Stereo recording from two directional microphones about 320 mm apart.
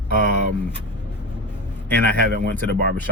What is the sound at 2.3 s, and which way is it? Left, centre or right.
Speech, right.